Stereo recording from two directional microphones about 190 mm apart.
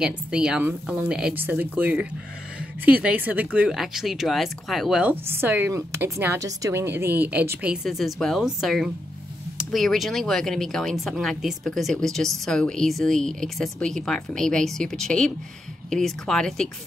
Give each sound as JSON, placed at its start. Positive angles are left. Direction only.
{"t": 0.0, "sound": "speech", "side_deg": -5}